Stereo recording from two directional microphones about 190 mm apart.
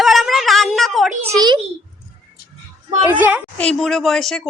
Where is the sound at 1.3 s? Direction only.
20° right (ahead or behind).